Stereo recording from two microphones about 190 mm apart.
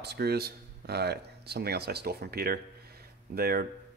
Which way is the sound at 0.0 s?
60° right (ahead or behind).